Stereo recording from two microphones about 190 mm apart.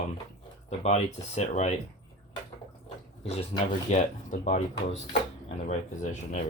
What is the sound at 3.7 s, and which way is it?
Speech, 40° left (ahead or behind).